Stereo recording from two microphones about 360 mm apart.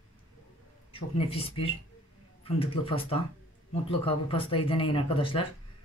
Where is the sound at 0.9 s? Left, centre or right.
Centre.